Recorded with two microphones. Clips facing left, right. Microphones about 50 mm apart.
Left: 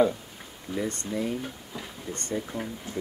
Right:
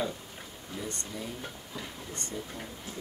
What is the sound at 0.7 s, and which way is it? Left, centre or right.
Speech, left.